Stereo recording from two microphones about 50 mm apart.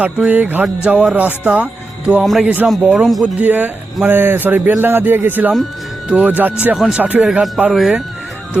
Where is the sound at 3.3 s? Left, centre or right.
Right.